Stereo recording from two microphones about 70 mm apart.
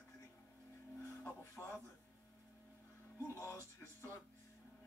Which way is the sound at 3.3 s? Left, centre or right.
Left.